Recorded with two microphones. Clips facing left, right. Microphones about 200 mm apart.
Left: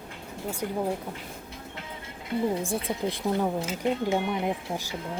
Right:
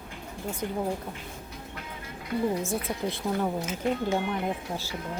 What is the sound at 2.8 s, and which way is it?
Speech, 15° left (ahead or behind).